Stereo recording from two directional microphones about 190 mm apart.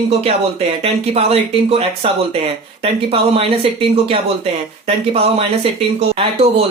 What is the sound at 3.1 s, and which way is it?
Speech, 30° right (ahead or behind).